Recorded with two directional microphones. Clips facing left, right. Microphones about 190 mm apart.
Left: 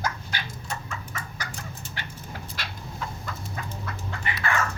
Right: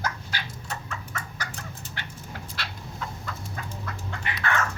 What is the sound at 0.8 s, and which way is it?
Chicken, 10° left (ahead or behind).